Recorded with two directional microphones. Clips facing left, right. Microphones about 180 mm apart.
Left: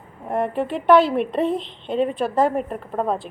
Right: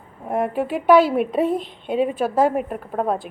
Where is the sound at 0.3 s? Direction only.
Centre (ahead or behind).